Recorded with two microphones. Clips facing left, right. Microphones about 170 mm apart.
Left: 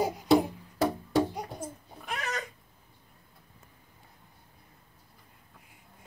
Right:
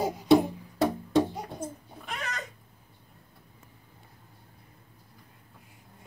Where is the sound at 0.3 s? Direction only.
Centre (ahead or behind).